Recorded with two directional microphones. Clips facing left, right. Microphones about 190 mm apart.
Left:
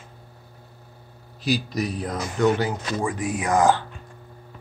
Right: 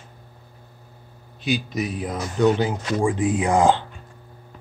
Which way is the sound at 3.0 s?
30° right (ahead or behind).